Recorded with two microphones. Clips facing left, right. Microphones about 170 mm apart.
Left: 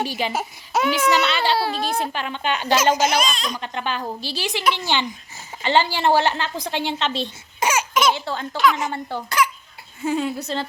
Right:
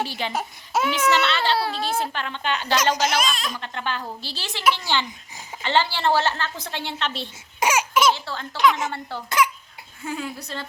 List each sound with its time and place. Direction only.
0.0 s a woman's voice: 10° left (ahead or behind)
0.7 s a child's voice: centre (ahead or behind)
1.1 s a woman's voice: 15° left (ahead or behind); by 3.5 s centre (ahead or behind)
3.5 s a woman's voice: 15° left (ahead or behind)
7.6 s laughter: 10° right (ahead or behind)
8.0 s a woman's voice: 15° left (ahead or behind)
8.5 s a woman's voice: 20° right (ahead or behind)
8.8 s a woman's voice: 15° left (ahead or behind)